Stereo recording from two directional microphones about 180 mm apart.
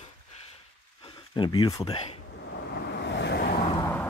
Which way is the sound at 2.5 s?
65° left (ahead or behind).